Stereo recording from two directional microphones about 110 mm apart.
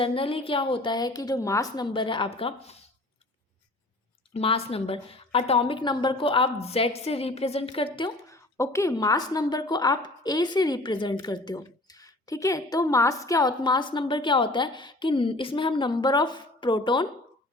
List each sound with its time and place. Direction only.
0.0 s a woman's voice: 55° left (ahead or behind)
4.4 s a woman's voice: 60° left (ahead or behind)
6.6 s a woman's voice: 65° left (ahead or behind)
8.3 s a woman's voice: 25° left (ahead or behind); by 17.1 s 45° left (ahead or behind)